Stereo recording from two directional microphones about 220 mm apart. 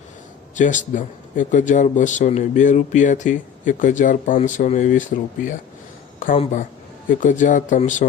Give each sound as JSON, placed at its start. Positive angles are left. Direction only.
{"t": 0.5, "sound": "a man's voice", "side_deg": 35}